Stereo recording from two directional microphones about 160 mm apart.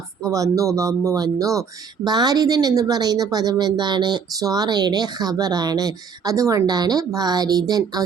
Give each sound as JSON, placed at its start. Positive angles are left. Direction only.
{"t": 0.3, "sound": "a woman's voice", "side_deg": -20}